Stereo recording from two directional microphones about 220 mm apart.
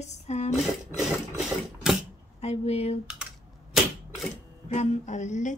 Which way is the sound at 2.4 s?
30° left (ahead or behind).